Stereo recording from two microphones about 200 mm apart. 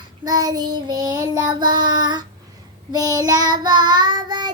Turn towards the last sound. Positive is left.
turn(degrees=-20)  # may be behind; listen again after turning